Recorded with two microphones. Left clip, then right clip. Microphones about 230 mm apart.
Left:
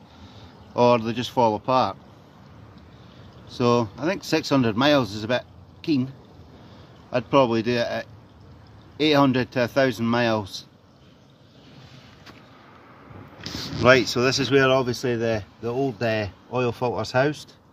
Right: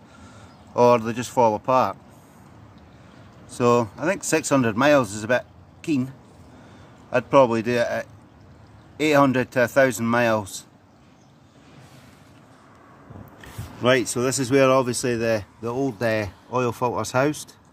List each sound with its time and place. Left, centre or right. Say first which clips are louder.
0.7 s speech: right 2 dB; centre
3.4 s speech: right 2 dB; centre
7.1 s speech: right 3 dB; centre
13.8 s speech: left 3 dB; centre